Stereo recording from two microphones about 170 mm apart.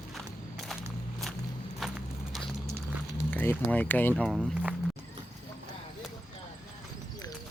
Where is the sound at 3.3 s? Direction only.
10° left (ahead or behind).